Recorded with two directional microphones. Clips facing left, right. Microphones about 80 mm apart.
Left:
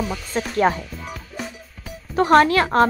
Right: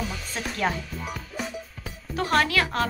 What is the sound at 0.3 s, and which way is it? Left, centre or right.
Speech, left.